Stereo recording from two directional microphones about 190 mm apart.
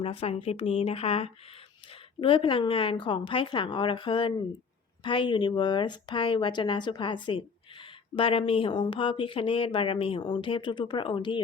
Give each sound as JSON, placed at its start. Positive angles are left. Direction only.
{"t": 0.0, "sound": "speech", "side_deg": 30}